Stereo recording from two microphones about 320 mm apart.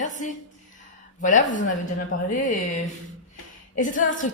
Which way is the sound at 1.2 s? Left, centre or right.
Left.